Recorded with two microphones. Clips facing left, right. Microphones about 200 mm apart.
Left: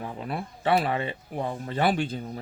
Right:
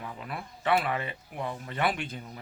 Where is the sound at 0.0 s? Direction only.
35° left (ahead or behind).